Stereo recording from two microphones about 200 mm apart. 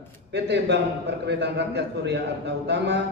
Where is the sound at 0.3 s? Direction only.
60° right (ahead or behind).